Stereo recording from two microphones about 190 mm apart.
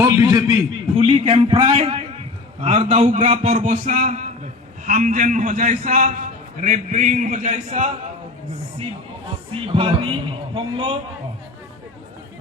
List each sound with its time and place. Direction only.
0.0 s a sound: 15° right (ahead or behind)
0.9 s a man's voice: 30° right (ahead or behind)
9.5 s a man's voice: 30° right (ahead or behind)